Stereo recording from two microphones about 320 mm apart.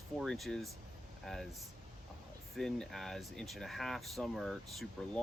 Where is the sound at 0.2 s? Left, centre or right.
Centre.